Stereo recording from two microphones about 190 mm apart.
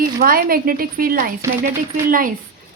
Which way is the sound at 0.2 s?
50° right (ahead or behind).